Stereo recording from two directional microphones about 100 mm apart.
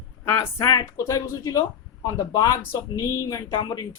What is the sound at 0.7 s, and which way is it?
Speech, 35° left (ahead or behind).